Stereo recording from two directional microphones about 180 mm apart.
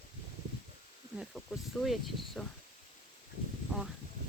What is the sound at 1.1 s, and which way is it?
Speech, centre (ahead or behind).